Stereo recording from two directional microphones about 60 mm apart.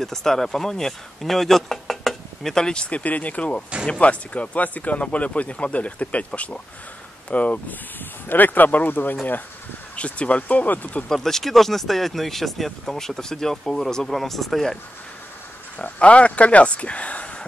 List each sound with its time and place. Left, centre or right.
0.0 s speech: centre; by 11.1 s left
11.1 s speech: centre
15.8 s speech: left